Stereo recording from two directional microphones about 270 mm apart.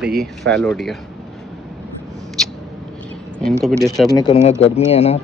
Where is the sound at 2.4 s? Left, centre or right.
Centre.